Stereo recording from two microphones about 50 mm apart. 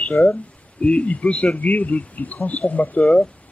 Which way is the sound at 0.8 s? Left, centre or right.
Left.